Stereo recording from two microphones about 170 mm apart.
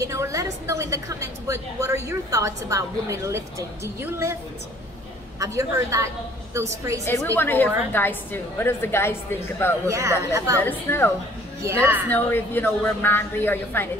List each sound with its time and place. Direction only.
0.0 s a woman's voice: 20° right (ahead or behind)
5.4 s a woman's voice: 20° right (ahead or behind)
7.3 s a woman's voice: 10° left (ahead or behind)
9.8 s a woman's voice: 15° right (ahead or behind)
10.6 s a woman's voice: 10° left (ahead or behind)
11.6 s a woman's voice: 15° right (ahead or behind)
12.1 s a woman's voice: 10° left (ahead or behind)